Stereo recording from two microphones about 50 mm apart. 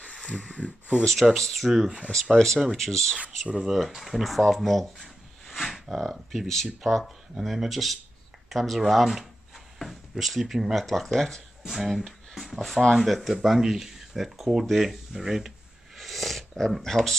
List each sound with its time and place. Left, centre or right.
0.3 s speech: centre
1.3 s speech: centre
1.9 s speech: centre
2.3 s speech: centre
2.6 s speech: centre
2.9 s speech: centre
16.0 s a sound: centre